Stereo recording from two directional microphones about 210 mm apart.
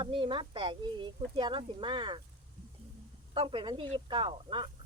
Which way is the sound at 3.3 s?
25° right (ahead or behind).